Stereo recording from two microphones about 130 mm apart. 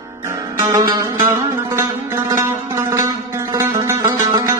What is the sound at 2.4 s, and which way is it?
Zither, 25° right (ahead or behind).